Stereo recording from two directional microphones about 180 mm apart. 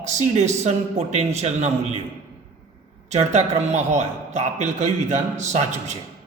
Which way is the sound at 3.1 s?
40° right (ahead or behind).